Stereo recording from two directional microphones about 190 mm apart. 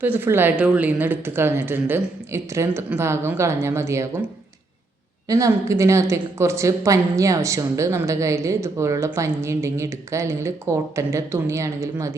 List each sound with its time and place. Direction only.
0.0 s speech: 10° right (ahead or behind)
5.3 s speech: 15° right (ahead or behind)